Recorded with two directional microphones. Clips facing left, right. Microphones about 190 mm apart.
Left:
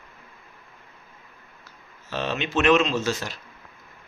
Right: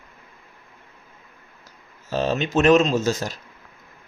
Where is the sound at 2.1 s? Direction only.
40° right (ahead or behind).